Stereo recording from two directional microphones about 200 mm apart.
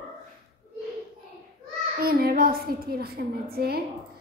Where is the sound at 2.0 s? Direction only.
50° right (ahead or behind).